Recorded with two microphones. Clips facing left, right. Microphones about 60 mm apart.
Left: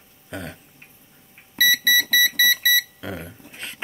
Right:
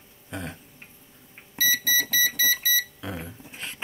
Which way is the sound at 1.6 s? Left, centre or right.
Left.